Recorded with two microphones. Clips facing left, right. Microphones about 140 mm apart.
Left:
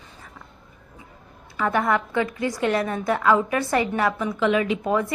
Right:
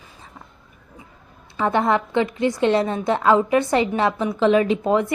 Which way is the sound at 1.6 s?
25° right (ahead or behind).